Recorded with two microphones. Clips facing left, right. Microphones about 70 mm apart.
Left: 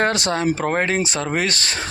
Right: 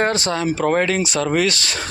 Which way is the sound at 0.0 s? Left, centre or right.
Left.